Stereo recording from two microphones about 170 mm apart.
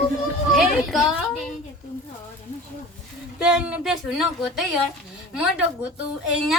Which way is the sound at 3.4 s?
5° right (ahead or behind).